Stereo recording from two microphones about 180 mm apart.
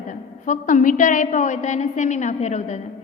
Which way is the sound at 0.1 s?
45° left (ahead or behind).